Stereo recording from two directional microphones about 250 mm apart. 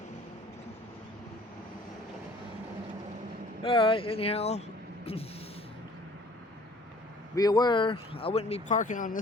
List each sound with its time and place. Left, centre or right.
3.6 s speech: left
7.3 s speech: centre; by 9.2 s left